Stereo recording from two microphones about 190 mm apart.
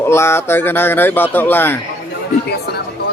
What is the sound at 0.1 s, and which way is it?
Speech, 15° left (ahead or behind).